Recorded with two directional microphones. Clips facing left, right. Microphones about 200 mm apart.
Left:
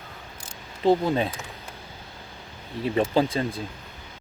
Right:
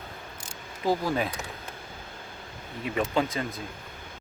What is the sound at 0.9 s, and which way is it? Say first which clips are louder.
Speech: left 5 dB; 25° left (ahead or behind).